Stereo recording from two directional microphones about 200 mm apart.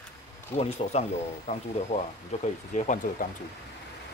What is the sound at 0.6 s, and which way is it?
Speech, 30° left (ahead or behind).